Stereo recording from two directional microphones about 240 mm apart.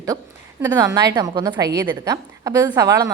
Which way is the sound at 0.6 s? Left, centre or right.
Centre.